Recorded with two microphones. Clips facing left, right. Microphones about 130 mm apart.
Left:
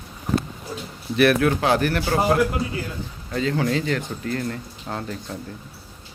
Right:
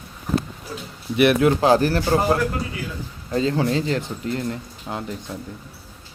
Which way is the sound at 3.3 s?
30° right (ahead or behind).